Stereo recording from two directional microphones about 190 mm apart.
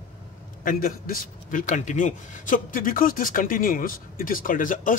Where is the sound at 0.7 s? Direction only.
45° left (ahead or behind).